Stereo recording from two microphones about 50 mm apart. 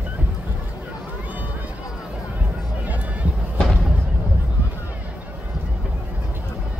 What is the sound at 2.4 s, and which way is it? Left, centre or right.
Music, right.